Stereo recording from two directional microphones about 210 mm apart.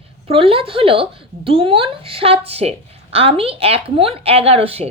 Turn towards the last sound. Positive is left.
turn(degrees=-30)  # may be behind; listen again after turning